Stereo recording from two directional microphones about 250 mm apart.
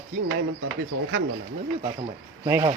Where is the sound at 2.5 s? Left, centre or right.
Centre.